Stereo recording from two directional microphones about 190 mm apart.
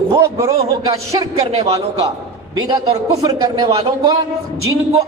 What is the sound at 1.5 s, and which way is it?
Speech, 30° right (ahead or behind).